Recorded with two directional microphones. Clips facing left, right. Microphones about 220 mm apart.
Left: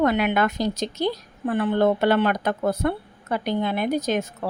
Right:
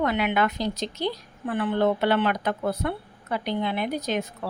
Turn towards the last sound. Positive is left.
turn(degrees=45)  # may be behind; listen again after turning